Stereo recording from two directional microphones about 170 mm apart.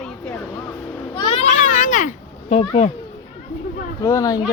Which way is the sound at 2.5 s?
35° left (ahead or behind).